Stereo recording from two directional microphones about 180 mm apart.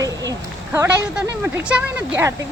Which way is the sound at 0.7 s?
10° right (ahead or behind).